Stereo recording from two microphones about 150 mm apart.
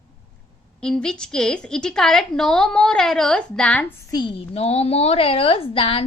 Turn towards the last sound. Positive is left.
turn(degrees=40)  # may be behind; listen again after turning